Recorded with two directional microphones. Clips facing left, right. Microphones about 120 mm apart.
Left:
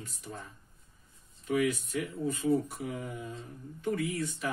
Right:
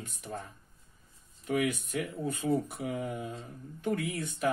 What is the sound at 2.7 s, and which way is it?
Speech, 55° right (ahead or behind).